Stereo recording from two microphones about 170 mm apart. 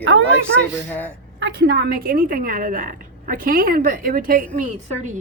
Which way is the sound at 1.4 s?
90° right.